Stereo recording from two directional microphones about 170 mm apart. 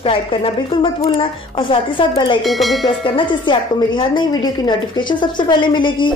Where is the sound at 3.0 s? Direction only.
30° left (ahead or behind).